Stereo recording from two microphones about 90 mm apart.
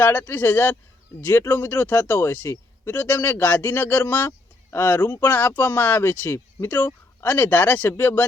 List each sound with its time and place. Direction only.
0.0 s a man's voice: 20° left (ahead or behind)